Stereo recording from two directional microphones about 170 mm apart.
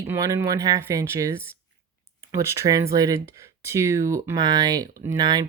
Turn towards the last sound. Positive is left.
turn(degrees=-25)  # may be behind; listen again after turning